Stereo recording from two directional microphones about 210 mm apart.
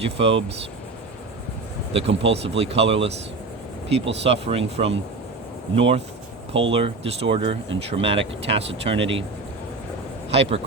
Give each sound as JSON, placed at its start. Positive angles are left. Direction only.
{"t": 0.0, "sound": "speech", "side_deg": -25}
{"t": 1.9, "sound": "speech", "side_deg": -25}
{"t": 10.3, "sound": "speech", "side_deg": -30}